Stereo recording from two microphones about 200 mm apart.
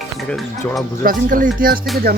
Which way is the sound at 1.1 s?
45° right (ahead or behind).